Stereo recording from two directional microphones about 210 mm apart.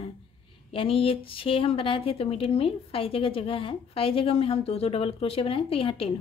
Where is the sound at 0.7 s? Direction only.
25° left (ahead or behind).